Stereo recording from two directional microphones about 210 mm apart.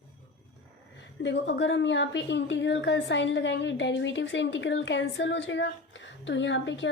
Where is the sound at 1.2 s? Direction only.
60° left (ahead or behind).